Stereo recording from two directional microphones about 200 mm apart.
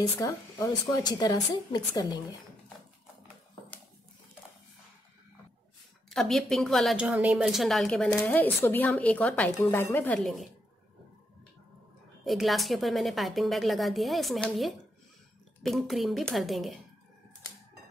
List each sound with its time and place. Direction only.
0.0 s speech: 15° left (ahead or behind)
6.0 s a woman's voice: centre (ahead or behind)
12.3 s a woman's voice: centre (ahead or behind)